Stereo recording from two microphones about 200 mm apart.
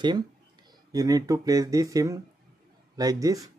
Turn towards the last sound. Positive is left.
turn(degrees=-15)  # may be behind; listen again after turning